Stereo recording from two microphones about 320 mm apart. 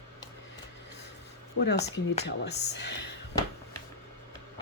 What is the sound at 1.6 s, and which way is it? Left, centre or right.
Speech, left.